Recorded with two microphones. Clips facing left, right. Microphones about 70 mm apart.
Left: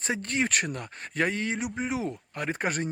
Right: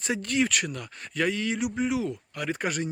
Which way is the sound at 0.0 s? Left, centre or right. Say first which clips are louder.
Right 2 dB; left.